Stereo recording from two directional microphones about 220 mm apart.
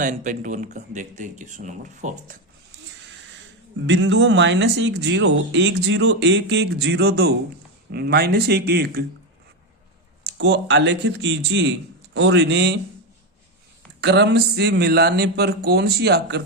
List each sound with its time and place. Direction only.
0.0 s speech: 35° right (ahead or behind)
3.8 s speech: 55° right (ahead or behind)
10.2 s speech: 50° right (ahead or behind)
14.0 s speech: 50° right (ahead or behind)